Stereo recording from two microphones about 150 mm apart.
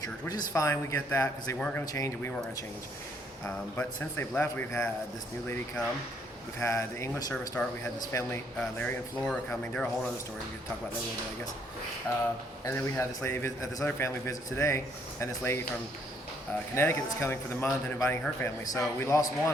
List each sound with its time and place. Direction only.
0.0 s a man's voice: 25° left (ahead or behind)
1.5 s speech: 5° left (ahead or behind)
1.8 s a man's voice: 25° left (ahead or behind)
3.8 s speech: 15° left (ahead or behind)
6.6 s a man's voice: 20° left (ahead or behind)
12.1 s a man's voice: 25° left (ahead or behind)
16.7 s a man's voice: 15° left (ahead or behind)